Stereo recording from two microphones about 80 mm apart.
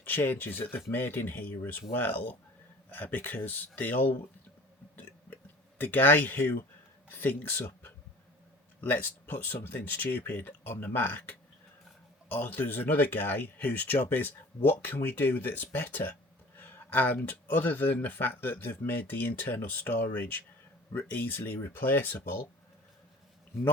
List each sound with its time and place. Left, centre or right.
0.0 s speech: left
4.9 s a sound: left
7.1 s speech: left